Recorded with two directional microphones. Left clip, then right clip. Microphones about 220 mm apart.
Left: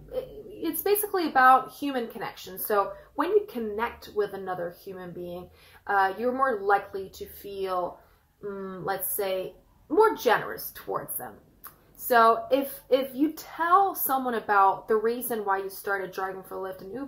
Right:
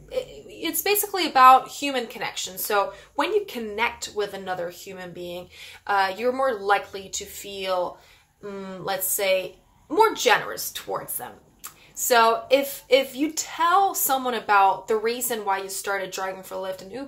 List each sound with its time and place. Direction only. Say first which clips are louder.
0.1 s a woman's voice: right 4 dB; 20° right (ahead or behind)